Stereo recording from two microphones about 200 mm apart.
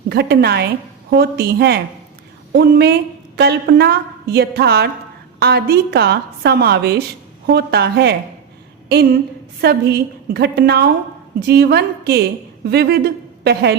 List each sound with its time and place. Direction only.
0.1 s a woman's voice: 55° right (ahead or behind)
9.6 s a woman's voice: 50° right (ahead or behind)